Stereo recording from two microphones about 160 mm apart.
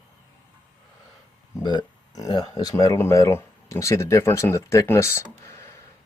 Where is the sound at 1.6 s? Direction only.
25° left (ahead or behind).